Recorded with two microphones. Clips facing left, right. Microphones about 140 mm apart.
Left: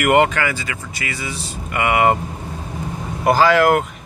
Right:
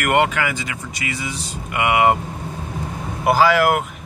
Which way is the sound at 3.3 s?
5° right (ahead or behind).